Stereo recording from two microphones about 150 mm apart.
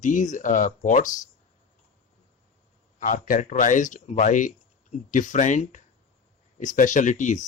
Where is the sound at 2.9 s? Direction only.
60° left (ahead or behind).